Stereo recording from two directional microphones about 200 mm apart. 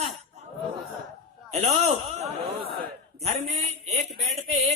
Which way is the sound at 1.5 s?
30° right (ahead or behind).